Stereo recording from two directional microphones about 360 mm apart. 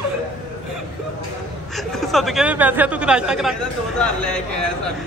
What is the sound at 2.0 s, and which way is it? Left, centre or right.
Speech, centre.